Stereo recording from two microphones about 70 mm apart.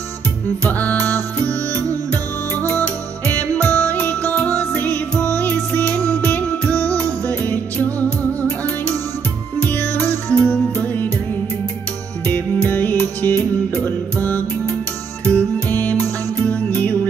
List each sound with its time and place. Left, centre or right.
0.7 s music: left
3.6 s music: left
9.6 s music: left
12.3 s music: left